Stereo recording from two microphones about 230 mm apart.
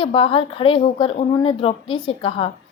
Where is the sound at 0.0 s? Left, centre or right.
Left.